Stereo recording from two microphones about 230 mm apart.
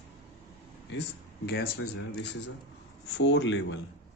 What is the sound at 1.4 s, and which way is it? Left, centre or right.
Speech, left.